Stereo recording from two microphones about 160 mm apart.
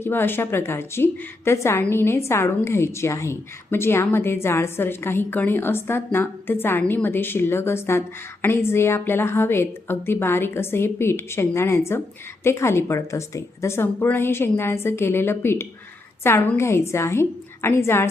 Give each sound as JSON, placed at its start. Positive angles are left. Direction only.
{"t": 0.0, "sound": "a woman's voice", "side_deg": 15}